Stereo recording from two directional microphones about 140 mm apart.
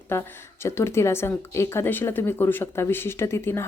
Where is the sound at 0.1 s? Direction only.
20° left (ahead or behind).